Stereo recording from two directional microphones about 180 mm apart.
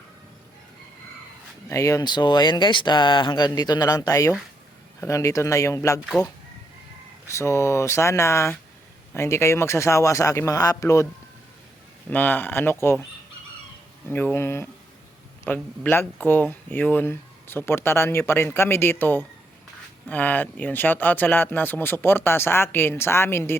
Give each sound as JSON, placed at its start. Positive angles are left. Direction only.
{"t": 1.7, "sound": "speech", "side_deg": 20}
{"t": 7.3, "sound": "speech", "side_deg": 15}
{"t": 12.1, "sound": "speech", "side_deg": 10}
{"t": 14.1, "sound": "speech", "side_deg": 10}